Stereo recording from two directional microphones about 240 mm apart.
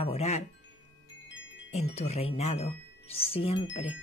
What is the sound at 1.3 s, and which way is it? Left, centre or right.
Music, left.